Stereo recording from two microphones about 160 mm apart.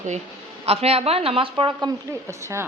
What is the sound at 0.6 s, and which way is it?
A woman's voice, 40° right (ahead or behind).